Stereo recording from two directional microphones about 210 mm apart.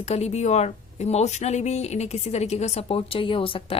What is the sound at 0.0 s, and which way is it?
A woman's voice, 30° left (ahead or behind).